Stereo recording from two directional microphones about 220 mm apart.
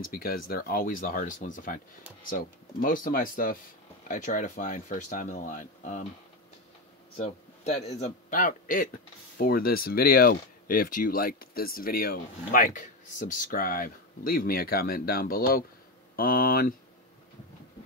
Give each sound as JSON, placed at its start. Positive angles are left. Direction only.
{"t": 0.0, "sound": "speech", "side_deg": 40}
{"t": 7.2, "sound": "speech", "side_deg": 30}